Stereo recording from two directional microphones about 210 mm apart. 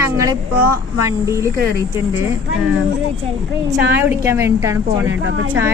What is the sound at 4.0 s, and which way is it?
Speech, 10° right (ahead or behind).